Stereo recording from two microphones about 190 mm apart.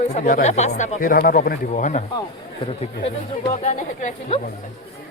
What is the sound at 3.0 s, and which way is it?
Speech, 35° left (ahead or behind).